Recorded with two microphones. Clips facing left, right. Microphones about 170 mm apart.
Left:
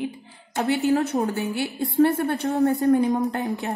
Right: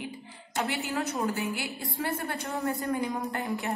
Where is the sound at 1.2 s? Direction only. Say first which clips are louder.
Left 5 dB; 65° left (ahead or behind).